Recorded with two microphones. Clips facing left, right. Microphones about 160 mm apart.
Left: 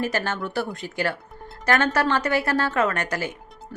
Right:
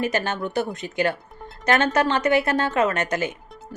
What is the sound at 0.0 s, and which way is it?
A woman's voice, 20° right (ahead or behind).